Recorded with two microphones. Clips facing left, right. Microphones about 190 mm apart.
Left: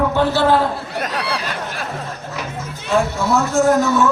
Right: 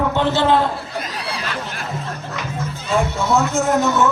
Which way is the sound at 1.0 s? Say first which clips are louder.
Left 5 dB; 70° left (ahead or behind).